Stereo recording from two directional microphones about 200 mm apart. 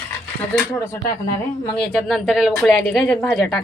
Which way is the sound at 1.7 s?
Centre (ahead or behind).